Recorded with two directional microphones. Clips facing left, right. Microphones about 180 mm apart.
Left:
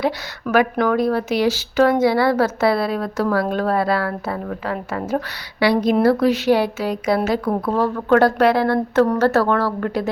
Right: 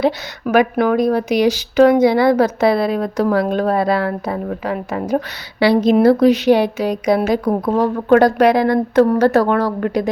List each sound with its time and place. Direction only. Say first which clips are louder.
0.4 s speech: right 3 dB; 15° right (ahead or behind)